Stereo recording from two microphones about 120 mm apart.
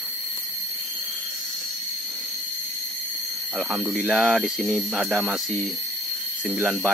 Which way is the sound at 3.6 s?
5° right (ahead or behind).